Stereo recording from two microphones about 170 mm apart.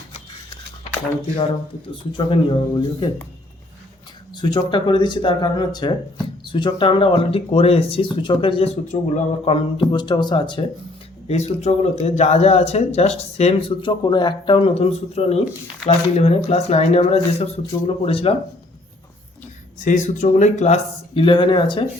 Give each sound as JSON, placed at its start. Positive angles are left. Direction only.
{"t": 2.1, "sound": "speech", "side_deg": 30}
{"t": 4.4, "sound": "speech", "side_deg": 25}
{"t": 11.3, "sound": "speech", "side_deg": 40}
{"t": 19.8, "sound": "speech", "side_deg": 45}